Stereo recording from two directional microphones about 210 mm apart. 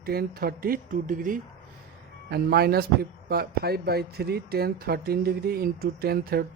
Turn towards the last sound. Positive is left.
turn(degrees=-50)  # may be behind; listen again after turning